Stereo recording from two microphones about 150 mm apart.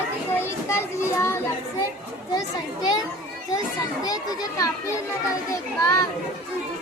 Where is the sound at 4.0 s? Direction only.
25° left (ahead or behind).